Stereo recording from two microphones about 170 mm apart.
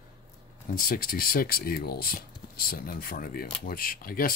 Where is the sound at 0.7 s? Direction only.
55° left (ahead or behind).